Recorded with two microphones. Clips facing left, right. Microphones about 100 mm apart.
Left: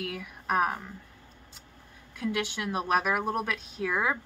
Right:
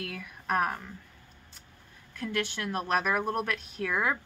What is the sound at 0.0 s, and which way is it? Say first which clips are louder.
Speech: left 3 dB; 5° left (ahead or behind).